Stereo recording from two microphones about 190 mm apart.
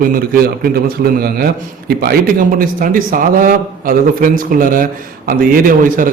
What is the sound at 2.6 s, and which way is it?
A man's voice, 45° right (ahead or behind).